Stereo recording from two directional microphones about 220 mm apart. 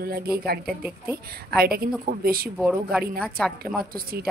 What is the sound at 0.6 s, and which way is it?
Speech, 5° right (ahead or behind).